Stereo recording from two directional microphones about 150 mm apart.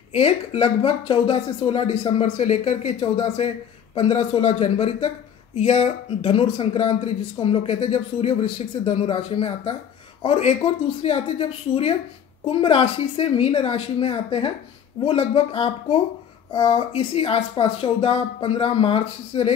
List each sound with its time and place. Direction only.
0.1 s a man's voice: 40° left (ahead or behind)